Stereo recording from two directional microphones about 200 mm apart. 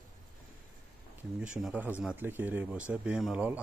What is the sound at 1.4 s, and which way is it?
Speech, 5° right (ahead or behind).